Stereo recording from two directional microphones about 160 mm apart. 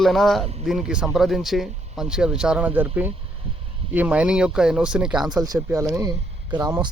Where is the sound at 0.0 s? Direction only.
Centre (ahead or behind).